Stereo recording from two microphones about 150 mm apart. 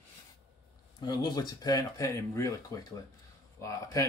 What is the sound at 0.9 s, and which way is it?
Speech, 25° left (ahead or behind).